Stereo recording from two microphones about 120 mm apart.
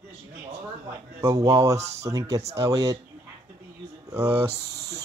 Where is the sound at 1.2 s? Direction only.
30° right (ahead or behind).